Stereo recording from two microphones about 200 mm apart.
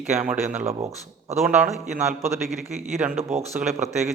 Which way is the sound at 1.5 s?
5° right (ahead or behind).